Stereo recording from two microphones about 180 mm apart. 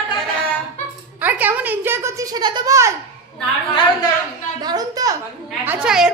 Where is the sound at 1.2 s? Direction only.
10° right (ahead or behind).